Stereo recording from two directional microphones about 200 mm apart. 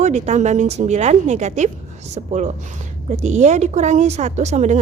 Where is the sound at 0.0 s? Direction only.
35° right (ahead or behind).